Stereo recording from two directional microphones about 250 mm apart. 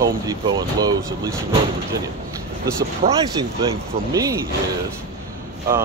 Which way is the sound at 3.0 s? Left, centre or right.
Right.